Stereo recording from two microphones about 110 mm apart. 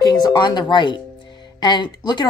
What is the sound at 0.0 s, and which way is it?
Speech, 40° left (ahead or behind).